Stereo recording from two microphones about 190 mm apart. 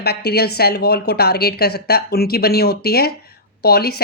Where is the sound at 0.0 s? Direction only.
55° left (ahead or behind).